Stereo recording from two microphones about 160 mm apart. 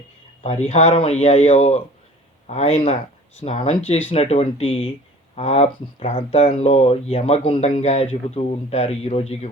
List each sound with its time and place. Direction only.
0.7 s speech: 40° left (ahead or behind)